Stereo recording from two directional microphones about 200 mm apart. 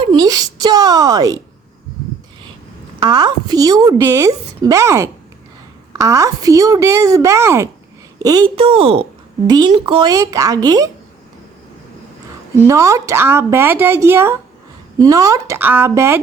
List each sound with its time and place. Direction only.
0.0 s a woman's voice: 20° right (ahead or behind)
3.0 s a woman's voice: 20° right (ahead or behind)
12.6 s a woman's voice: 15° right (ahead or behind)